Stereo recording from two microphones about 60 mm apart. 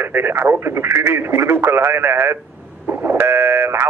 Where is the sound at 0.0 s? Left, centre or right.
Right.